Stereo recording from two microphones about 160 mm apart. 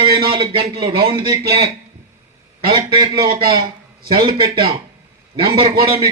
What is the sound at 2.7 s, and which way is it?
A man's voice, 30° right (ahead or behind).